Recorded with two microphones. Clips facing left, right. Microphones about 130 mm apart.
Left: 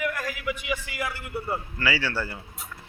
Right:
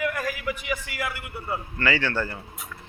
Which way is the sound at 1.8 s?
10° left (ahead or behind).